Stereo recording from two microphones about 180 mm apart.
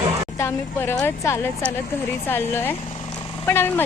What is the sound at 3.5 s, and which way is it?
Speech, 10° left (ahead or behind).